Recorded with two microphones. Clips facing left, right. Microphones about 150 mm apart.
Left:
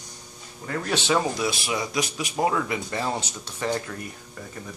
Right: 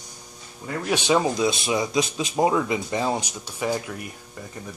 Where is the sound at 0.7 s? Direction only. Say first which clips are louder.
Right 2 dB; 15° right (ahead or behind).